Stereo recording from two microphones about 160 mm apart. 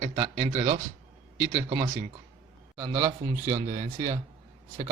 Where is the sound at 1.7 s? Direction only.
25° right (ahead or behind).